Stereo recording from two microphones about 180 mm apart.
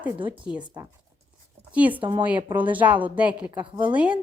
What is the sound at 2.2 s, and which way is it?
A woman's voice, 10° right (ahead or behind).